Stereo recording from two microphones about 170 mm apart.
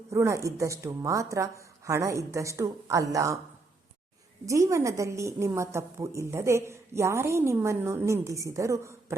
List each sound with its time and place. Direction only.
0.1 s a woman's voice: 15° right (ahead or behind)
4.4 s a woman's voice: 20° right (ahead or behind)